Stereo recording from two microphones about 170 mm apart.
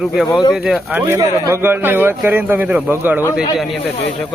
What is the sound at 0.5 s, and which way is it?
Speech, 5° right (ahead or behind).